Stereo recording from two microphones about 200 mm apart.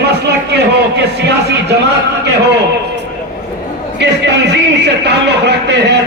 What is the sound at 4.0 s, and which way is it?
A man's voice, 60° right (ahead or behind).